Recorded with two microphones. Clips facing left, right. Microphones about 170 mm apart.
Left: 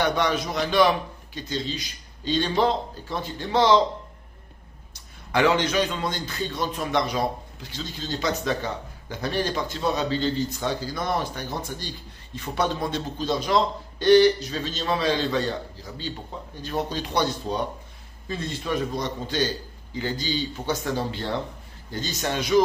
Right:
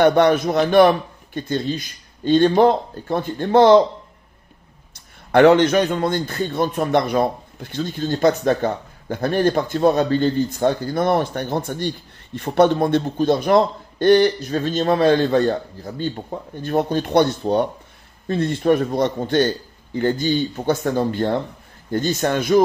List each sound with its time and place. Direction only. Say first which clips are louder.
0.0 s a man's voice: right 9 dB; 55° right (ahead or behind)
5.3 s a man's voice: right 9 dB; 55° right (ahead or behind)